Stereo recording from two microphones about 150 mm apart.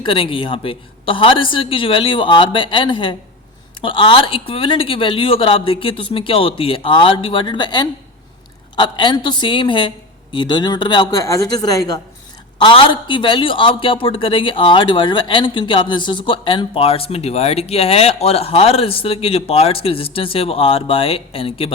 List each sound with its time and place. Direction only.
0.0 s a man's voice: 35° left (ahead or behind)